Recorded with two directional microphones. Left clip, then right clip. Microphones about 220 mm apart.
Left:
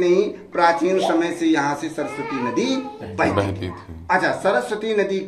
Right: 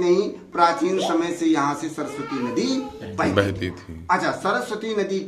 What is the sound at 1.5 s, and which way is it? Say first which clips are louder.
Speech: left 1 dB; 55° right (ahead or behind).